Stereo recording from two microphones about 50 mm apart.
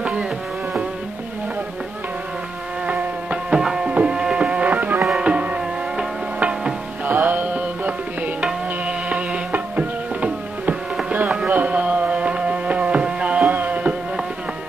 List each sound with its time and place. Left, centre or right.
0.0 s music: centre
2.9 s insect: right
3.6 s music: centre
7.1 s music: right
8.4 s music: right
9.5 s music: right
11.2 s music: centre
11.5 s music: right
13.5 s a sound: right